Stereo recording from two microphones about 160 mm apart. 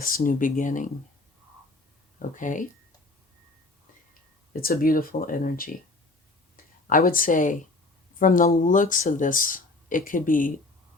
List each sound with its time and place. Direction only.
0.0 s speech: 60° left (ahead or behind)
2.1 s speech: 55° left (ahead or behind)
4.6 s speech: 65° left (ahead or behind)
6.9 s speech: 60° left (ahead or behind)